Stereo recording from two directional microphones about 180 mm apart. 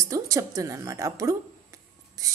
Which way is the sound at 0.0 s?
20° right (ahead or behind).